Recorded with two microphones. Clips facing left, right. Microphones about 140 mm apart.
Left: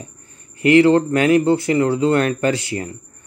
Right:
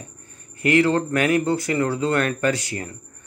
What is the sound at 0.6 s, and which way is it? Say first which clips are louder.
Speech: left 6 dB; 25° left (ahead or behind).